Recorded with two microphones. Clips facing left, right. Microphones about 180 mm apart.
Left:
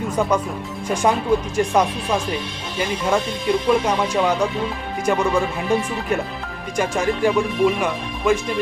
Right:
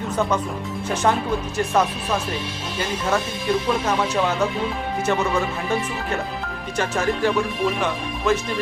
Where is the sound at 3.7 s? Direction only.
10° left (ahead or behind).